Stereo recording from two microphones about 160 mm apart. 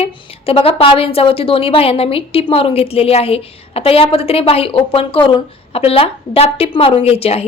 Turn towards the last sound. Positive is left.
turn(degrees=40)  # may be behind; listen again after turning